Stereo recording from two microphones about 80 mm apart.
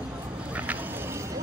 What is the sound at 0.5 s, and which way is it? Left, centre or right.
Music, centre.